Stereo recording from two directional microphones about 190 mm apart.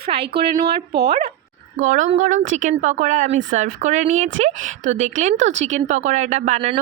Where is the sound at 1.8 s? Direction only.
40° right (ahead or behind).